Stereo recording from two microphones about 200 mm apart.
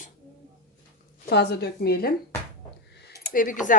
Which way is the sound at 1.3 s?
55° left (ahead or behind).